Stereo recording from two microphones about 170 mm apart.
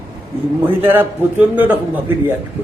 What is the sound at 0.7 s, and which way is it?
A man's voice, 10° right (ahead or behind).